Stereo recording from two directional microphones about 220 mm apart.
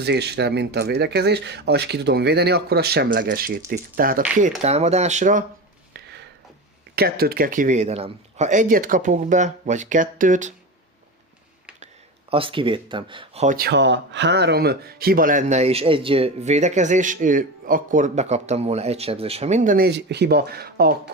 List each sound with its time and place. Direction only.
0.0 s speech: 50° right (ahead or behind)
4.6 s speech: 30° right (ahead or behind)
5.9 s a sound: 50° right (ahead or behind)
6.9 s speech: 45° right (ahead or behind)
12.3 s speech: 25° right (ahead or behind); by 20.9 s 45° right (ahead or behind)